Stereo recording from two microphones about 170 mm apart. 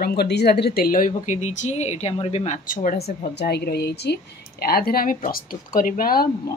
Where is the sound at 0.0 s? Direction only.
70° left (ahead or behind); by 3.0 s 50° left (ahead or behind).